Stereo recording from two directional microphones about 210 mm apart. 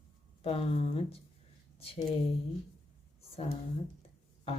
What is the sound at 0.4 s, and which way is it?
Speech, 30° left (ahead or behind).